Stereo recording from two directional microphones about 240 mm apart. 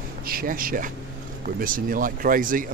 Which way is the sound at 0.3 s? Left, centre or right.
Right.